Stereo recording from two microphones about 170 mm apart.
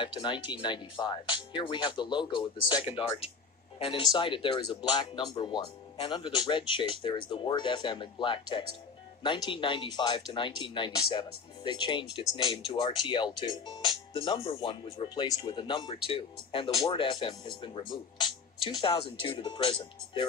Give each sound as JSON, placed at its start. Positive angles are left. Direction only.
{"t": 0.0, "sound": "speech", "side_deg": 30}